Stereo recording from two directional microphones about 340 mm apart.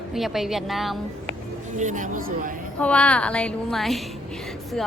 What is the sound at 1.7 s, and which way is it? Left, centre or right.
Speech, right.